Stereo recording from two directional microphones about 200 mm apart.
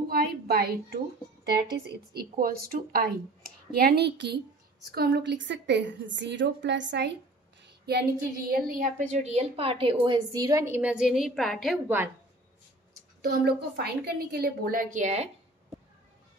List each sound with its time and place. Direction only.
0.1 s a sound: 50° right (ahead or behind)
2.1 s a woman's voice: 50° right (ahead or behind); by 11.8 s centre (ahead or behind)
13.2 s a woman's voice: 50° right (ahead or behind); by 15.2 s 35° right (ahead or behind)